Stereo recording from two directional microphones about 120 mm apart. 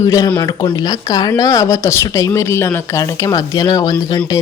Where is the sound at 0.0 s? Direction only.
25° left (ahead or behind).